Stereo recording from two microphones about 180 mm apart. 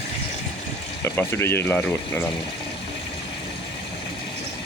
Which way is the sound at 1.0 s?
15° left (ahead or behind).